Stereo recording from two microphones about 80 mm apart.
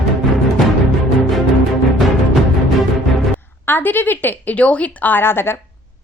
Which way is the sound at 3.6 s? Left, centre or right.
Left.